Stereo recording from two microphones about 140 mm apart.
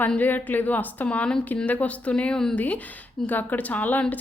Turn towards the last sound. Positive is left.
turn(degrees=10)  # may be behind; listen again after turning